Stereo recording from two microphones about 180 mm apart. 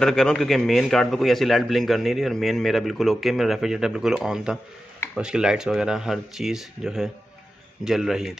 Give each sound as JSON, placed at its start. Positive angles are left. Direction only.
{"t": 0.0, "sound": "a man's voice", "side_deg": 5}